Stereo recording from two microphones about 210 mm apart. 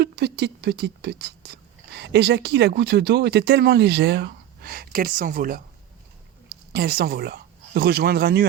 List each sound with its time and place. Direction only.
0.0 s speech: 50° right (ahead or behind)
6.7 s speech: 50° right (ahead or behind)